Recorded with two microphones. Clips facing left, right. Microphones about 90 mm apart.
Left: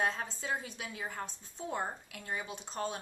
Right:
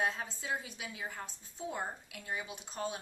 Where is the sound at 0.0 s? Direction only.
5° right (ahead or behind).